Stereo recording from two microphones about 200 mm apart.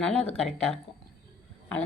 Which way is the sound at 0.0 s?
5° left (ahead or behind).